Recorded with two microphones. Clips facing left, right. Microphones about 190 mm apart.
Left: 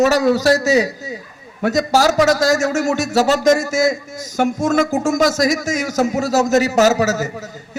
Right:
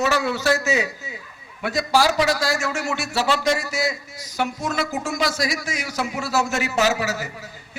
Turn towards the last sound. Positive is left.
turn(degrees=40)  # may be behind; listen again after turning